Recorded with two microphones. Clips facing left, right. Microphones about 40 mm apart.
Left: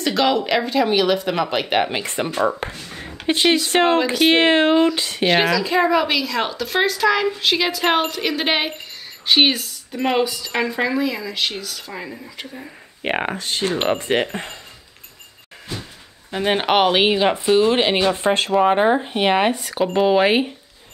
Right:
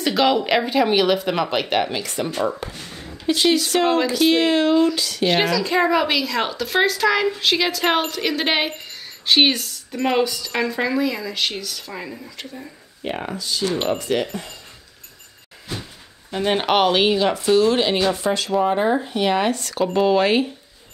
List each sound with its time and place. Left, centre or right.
0.0 s a woman's voice: centre
1.7 s speech: centre
2.6 s speech: left
3.0 s a sound: left
3.5 s speech: left
4.0 s speech: centre
4.3 s speech: left
5.3 s a woman's voice: centre
13.0 s speech: left
15.8 s speech: centre
18.1 s speech: left; by 20.5 s centre